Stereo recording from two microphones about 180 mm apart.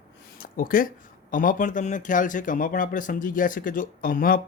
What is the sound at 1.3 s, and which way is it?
Speech, 50° left (ahead or behind).